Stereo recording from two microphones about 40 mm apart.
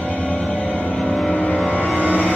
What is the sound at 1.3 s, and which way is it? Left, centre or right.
Vehicle, left.